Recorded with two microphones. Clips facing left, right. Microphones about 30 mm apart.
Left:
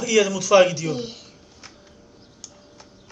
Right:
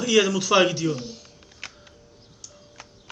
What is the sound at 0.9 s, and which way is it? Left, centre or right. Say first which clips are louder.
Speech: left 3 dB; left.